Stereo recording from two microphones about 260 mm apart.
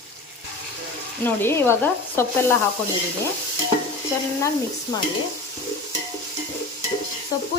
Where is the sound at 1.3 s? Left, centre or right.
Centre.